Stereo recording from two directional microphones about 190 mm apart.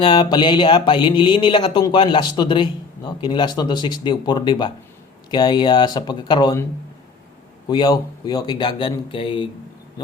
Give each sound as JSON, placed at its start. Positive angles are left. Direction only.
{"t": 0.0, "sound": "speech", "side_deg": 25}
{"t": 7.7, "sound": "speech", "side_deg": 20}